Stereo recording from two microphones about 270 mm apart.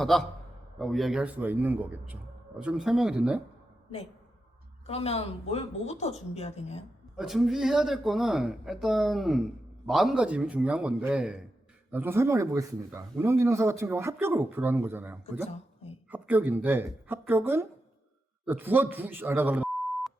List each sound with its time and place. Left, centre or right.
0.0 s speech: centre
4.9 s speech: left
7.2 s speech: centre